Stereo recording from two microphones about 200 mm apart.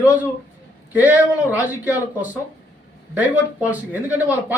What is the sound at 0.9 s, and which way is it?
Speech, 5° right (ahead or behind).